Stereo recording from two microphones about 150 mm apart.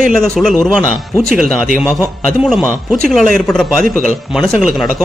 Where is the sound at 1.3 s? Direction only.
70° right (ahead or behind).